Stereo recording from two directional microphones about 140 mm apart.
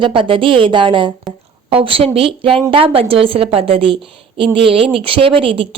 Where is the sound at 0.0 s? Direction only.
40° right (ahead or behind).